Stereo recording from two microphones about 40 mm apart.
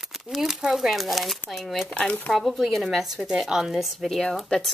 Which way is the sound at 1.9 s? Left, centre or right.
Left.